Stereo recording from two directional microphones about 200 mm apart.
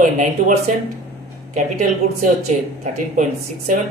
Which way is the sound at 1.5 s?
40° right (ahead or behind).